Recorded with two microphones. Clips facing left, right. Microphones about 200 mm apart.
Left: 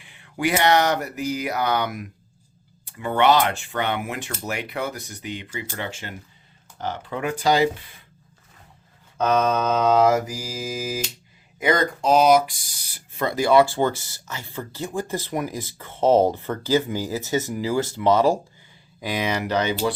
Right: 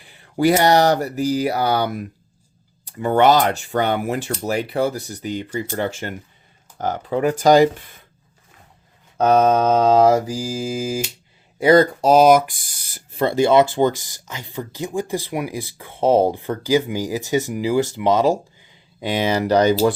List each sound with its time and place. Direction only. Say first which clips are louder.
0.0 s speech: right 7 dB; 35° right (ahead or behind)
9.1 s speech: right 6 dB; 35° right (ahead or behind); by 13.0 s 50° right (ahead or behind)
13.1 s speech: right 3 dB; 30° right (ahead or behind)
18.9 s speech: right 5 dB; 30° right (ahead or behind)